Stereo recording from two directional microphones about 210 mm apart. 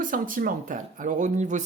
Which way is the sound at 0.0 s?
40° right (ahead or behind).